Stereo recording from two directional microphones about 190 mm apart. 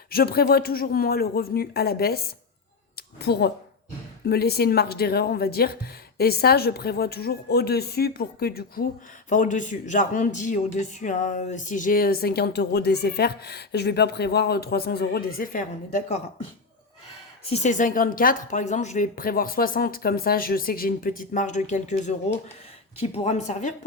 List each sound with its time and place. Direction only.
0.1 s a man's voice: 55° left (ahead or behind)
9.3 s a man's voice: 40° left (ahead or behind)
17.5 s a man's voice: 40° left (ahead or behind)